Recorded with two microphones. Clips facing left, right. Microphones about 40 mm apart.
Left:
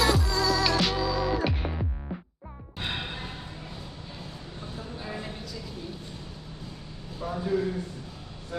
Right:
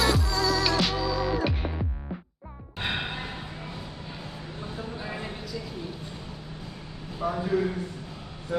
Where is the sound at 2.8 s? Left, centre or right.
Right.